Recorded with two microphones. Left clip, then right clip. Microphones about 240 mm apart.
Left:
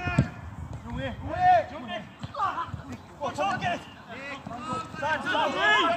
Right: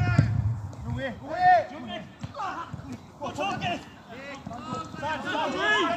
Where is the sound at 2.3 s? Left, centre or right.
Centre.